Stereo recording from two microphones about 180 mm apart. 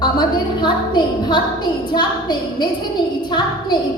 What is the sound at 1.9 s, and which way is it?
A woman's voice, 25° left (ahead or behind).